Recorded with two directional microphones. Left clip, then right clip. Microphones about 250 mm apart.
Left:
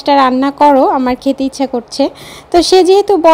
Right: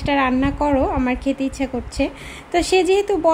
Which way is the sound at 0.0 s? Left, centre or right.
Left.